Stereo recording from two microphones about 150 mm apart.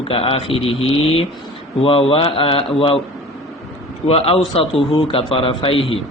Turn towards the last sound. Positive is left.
turn(degrees=35)  # may be behind; listen again after turning